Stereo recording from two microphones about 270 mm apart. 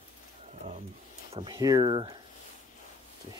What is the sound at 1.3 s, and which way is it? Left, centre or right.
Speech, centre.